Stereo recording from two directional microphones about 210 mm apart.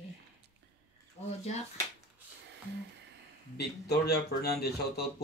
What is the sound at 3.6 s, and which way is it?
Speech, 50° left (ahead or behind).